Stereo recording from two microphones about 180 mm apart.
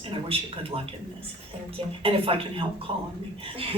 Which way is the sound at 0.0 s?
30° right (ahead or behind).